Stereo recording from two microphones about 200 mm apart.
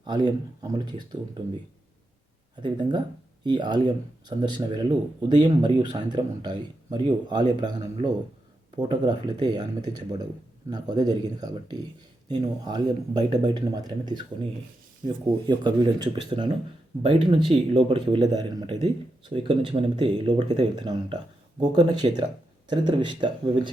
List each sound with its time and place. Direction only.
0.0 s speech: 20° right (ahead or behind)
2.6 s speech: 20° right (ahead or behind)